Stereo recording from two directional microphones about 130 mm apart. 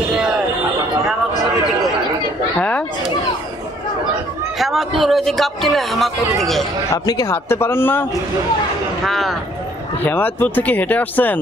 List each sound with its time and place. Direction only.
4.6 s speech: centre (ahead or behind)
7.1 s a man's voice: 25° left (ahead or behind)
9.0 s speech: centre (ahead or behind)
10.0 s speech: 15° left (ahead or behind)